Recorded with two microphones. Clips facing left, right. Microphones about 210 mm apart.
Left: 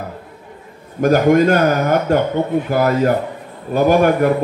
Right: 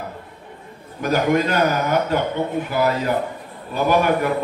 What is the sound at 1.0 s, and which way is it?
Speech, 50° left (ahead or behind).